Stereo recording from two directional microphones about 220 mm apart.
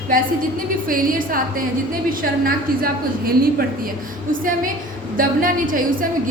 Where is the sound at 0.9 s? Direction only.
40° right (ahead or behind).